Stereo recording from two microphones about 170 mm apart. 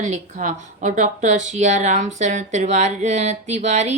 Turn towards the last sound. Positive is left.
turn(degrees=-40)  # may be behind; listen again after turning